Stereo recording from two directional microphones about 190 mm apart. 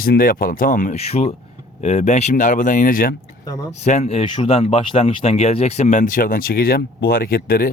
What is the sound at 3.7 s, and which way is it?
Speech, 35° left (ahead or behind).